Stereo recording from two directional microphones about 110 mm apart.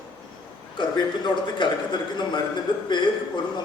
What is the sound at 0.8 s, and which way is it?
A man's voice, 45° left (ahead or behind).